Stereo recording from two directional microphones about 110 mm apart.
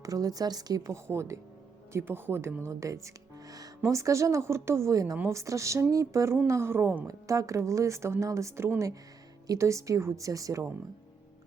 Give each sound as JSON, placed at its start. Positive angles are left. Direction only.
{"t": 0.0, "sound": "a woman's voice", "side_deg": -35}
{"t": 7.1, "sound": "speech", "side_deg": -30}